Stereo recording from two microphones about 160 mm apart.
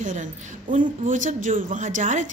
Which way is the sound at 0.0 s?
50° right (ahead or behind).